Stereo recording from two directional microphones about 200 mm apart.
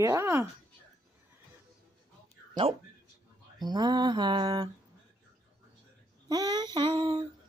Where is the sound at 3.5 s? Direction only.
20° right (ahead or behind).